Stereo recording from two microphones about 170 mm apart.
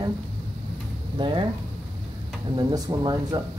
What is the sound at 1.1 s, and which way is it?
Speech, 25° right (ahead or behind).